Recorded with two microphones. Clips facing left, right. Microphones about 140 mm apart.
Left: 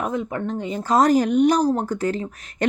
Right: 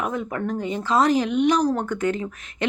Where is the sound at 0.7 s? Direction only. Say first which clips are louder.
Left 3 dB; 40° left (ahead or behind).